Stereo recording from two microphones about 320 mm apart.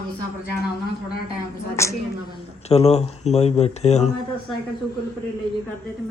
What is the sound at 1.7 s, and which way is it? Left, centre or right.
Speech, centre.